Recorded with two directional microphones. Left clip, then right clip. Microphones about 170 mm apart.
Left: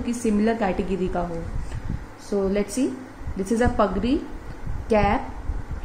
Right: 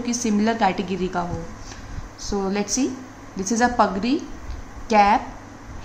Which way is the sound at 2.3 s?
Centre (ahead or behind).